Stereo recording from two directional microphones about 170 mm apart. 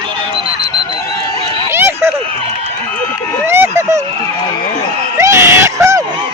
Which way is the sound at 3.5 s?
15° right (ahead or behind).